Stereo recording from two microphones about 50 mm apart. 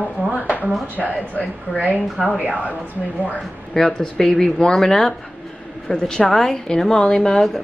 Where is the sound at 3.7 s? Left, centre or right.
Centre.